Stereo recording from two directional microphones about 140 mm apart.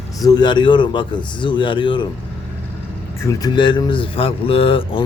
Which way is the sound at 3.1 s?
20° left (ahead or behind).